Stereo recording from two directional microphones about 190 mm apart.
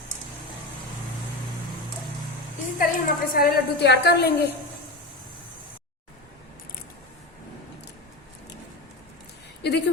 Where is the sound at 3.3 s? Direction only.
55° left (ahead or behind).